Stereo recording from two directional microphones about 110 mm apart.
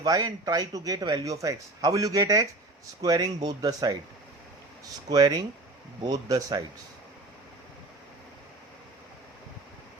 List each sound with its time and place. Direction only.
0.0 s speech: 40° right (ahead or behind)
5.0 s speech: 35° right (ahead or behind)